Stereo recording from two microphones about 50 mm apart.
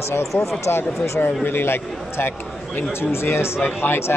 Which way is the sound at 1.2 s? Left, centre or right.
Left.